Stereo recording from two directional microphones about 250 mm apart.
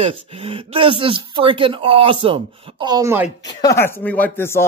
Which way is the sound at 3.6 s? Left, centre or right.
Centre.